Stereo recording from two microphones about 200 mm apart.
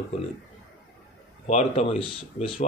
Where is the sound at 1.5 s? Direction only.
35° left (ahead or behind).